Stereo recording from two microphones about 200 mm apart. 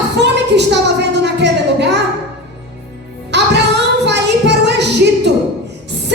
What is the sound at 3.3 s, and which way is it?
Music, 60° right (ahead or behind).